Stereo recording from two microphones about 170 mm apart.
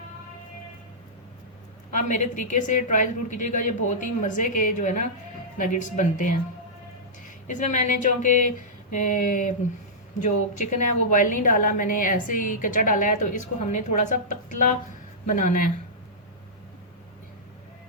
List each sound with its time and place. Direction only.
1.9 s a woman's voice: 45° left (ahead or behind)
7.5 s a woman's voice: 45° left (ahead or behind)